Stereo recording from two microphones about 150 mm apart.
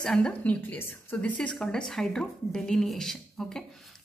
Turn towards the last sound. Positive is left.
turn(degrees=0)  # may be behind; listen again after turning